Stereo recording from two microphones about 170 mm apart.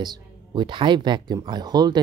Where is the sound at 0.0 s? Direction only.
25° right (ahead or behind).